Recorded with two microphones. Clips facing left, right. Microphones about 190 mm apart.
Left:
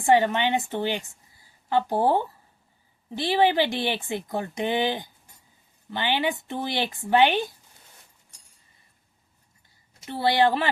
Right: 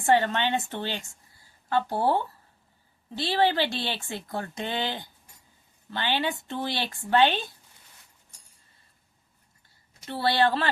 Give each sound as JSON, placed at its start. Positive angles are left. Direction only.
{"t": 0.0, "sound": "speech", "side_deg": 15}
{"t": 10.1, "sound": "speech", "side_deg": 15}